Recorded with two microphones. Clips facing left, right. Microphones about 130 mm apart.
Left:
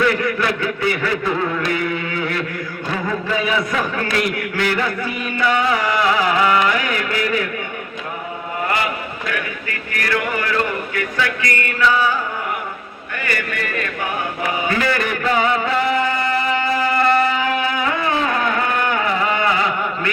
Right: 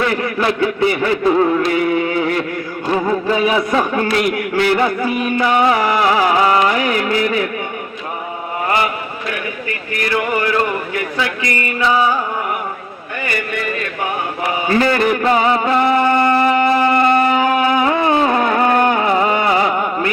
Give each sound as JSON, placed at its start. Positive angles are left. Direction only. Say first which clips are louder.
{"t": 0.0, "sound": "a man's voice", "louder": "right 1 dB", "side_deg": -30}
{"t": 2.9, "sound": "a man's voice", "louder": "right 6 dB", "side_deg": -35}
{"t": 5.6, "sound": "music", "louder": "right 4 dB", "side_deg": -30}
{"t": 10.9, "sound": "music", "louder": "right 1 dB", "side_deg": -25}
{"t": 14.7, "sound": "a sound", "louder": "right 9 dB", "side_deg": -30}
{"t": 17.5, "sound": "music", "louder": "right 6 dB", "side_deg": -30}